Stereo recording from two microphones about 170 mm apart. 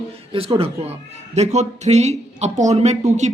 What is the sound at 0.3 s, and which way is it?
Speech, 35° right (ahead or behind).